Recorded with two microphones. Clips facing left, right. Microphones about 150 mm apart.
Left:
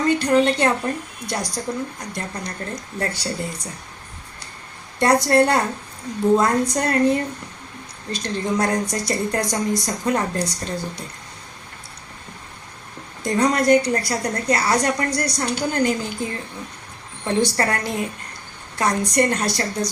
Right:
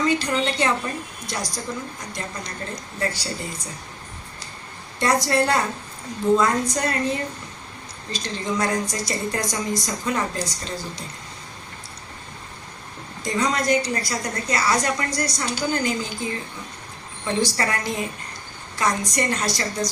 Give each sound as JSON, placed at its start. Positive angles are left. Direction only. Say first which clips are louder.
{"t": 0.0, "sound": "a woman's voice", "louder": "left 5 dB", "side_deg": 60}
{"t": 4.9, "sound": "a woman's voice", "louder": "left 4 dB", "side_deg": 60}
{"t": 13.2, "sound": "a woman's voice", "louder": "left 5 dB", "side_deg": 60}